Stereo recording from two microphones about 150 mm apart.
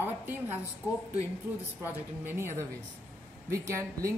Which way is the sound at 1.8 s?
15° right (ahead or behind).